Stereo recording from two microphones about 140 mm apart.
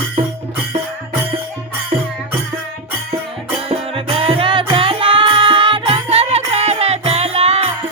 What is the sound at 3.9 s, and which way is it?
Music, 40° right (ahead or behind).